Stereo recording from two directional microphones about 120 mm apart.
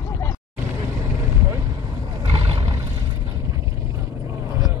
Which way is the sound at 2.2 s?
45° right (ahead or behind).